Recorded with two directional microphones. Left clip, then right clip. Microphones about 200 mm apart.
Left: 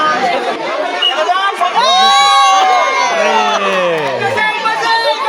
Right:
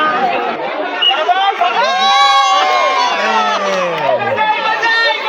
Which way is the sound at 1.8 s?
40° left (ahead or behind).